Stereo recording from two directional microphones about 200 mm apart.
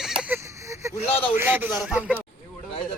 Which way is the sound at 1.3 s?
10° right (ahead or behind).